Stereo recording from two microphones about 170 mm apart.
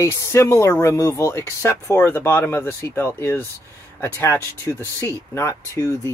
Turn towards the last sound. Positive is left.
turn(degrees=15)  # may be behind; listen again after turning